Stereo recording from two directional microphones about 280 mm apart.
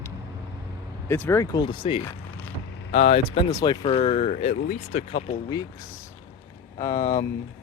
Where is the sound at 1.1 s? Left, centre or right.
Centre.